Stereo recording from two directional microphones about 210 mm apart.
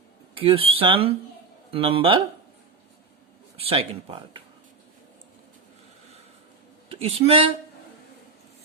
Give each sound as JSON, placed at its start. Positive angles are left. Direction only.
{"t": 0.3, "sound": "speech", "side_deg": -25}
{"t": 3.6, "sound": "speech", "side_deg": -30}
{"t": 6.8, "sound": "speech", "side_deg": -25}